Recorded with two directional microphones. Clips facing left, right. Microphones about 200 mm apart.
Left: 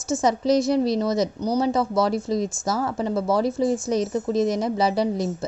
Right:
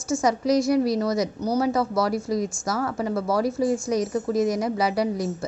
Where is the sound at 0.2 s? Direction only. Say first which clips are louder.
Left 2 dB; 25° left (ahead or behind).